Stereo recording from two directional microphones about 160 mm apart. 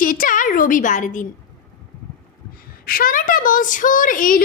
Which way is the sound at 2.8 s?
60° left (ahead or behind).